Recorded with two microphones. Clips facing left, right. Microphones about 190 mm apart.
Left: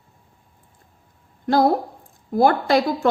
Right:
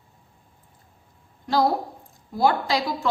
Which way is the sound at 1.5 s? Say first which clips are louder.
Left 4 dB; 55° left (ahead or behind).